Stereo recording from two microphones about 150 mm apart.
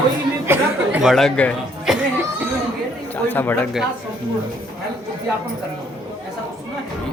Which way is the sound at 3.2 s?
10° left (ahead or behind).